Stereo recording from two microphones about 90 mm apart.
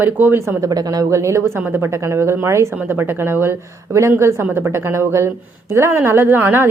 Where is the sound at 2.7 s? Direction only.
20° right (ahead or behind).